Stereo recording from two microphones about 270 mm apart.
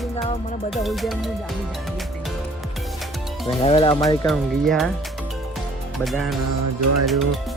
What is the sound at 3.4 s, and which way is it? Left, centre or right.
Speech, left.